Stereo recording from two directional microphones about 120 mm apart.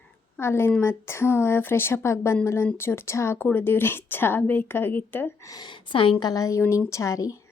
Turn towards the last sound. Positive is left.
turn(degrees=25)  # may be behind; listen again after turning